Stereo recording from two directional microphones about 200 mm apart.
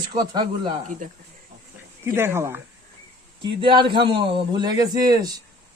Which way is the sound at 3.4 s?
25° right (ahead or behind).